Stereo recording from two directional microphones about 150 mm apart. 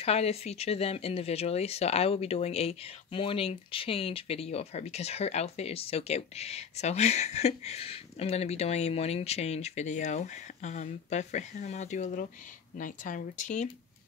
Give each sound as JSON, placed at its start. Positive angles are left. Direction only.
{"t": 0.0, "sound": "speech", "side_deg": 45}